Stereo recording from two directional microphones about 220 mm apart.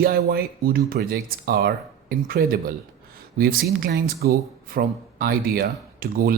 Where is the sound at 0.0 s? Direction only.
45° right (ahead or behind).